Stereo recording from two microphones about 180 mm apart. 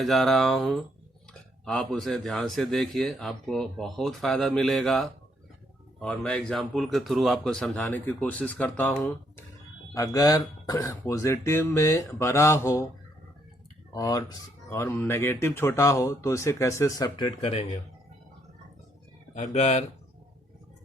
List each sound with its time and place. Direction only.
0.0 s speech: centre (ahead or behind); by 12.9 s 15° left (ahead or behind)
13.9 s speech: 20° left (ahead or behind)
19.3 s speech: 40° left (ahead or behind)